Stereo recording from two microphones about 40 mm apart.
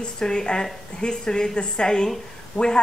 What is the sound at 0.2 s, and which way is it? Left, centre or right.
A woman's voice, centre.